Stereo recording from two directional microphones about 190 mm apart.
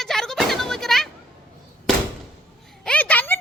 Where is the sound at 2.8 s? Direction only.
10° left (ahead or behind).